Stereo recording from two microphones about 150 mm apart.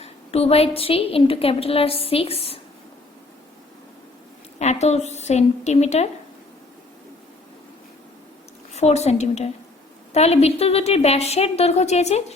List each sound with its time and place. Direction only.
0.0 s a woman's voice: 45° left (ahead or behind)
4.6 s a woman's voice: 50° left (ahead or behind)
8.7 s a woman's voice: 45° left (ahead or behind)